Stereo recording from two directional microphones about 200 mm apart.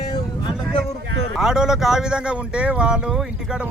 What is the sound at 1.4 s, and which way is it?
Speech, 5° right (ahead or behind).